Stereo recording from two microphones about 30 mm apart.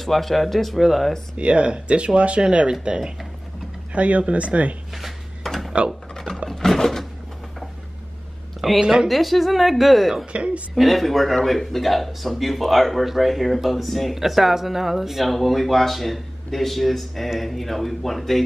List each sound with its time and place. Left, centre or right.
0.0 s speech: centre
1.3 s speech: right
3.9 s speech: right
5.4 s drawer open or close: centre
6.1 s a sound: centre
8.6 s speech: right
9.1 s speech: centre
10.3 s speech: right
10.7 s speech: centre